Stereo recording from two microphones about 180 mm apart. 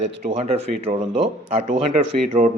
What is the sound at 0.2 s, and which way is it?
Speech, 35° right (ahead or behind).